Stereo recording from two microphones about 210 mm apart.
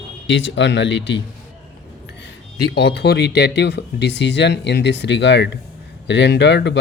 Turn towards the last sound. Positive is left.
turn(degrees=55)  # may be behind; listen again after turning